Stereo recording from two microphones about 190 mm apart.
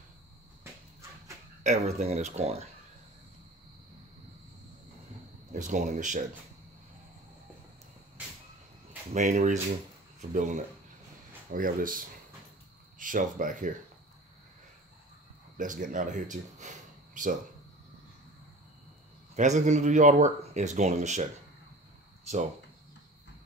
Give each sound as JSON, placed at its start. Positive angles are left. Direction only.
{"t": 1.6, "sound": "speech", "side_deg": -35}
{"t": 5.5, "sound": "speech", "side_deg": -40}
{"t": 9.1, "sound": "speech", "side_deg": -40}
{"t": 11.5, "sound": "speech", "side_deg": -45}
{"t": 13.0, "sound": "speech", "side_deg": -45}
{"t": 15.5, "sound": "speech", "side_deg": -45}
{"t": 19.3, "sound": "speech", "side_deg": -40}